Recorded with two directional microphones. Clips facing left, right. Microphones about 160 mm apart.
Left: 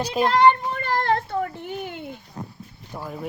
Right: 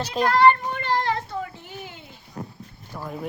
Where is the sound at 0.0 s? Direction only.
10° left (ahead or behind).